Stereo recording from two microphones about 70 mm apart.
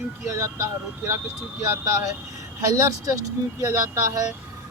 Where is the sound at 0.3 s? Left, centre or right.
Right.